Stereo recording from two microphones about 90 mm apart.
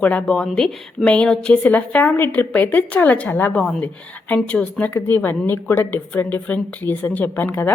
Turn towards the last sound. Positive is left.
turn(degrees=20)  # may be behind; listen again after turning